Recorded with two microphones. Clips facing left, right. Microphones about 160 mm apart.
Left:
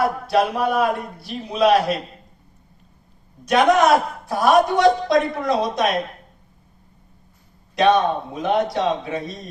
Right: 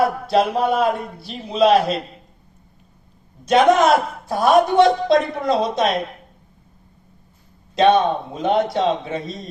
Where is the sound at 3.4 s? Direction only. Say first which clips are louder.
Right 2 dB; 25° right (ahead or behind).